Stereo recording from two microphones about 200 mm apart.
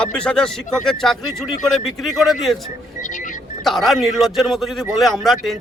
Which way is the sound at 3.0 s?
40° left (ahead or behind).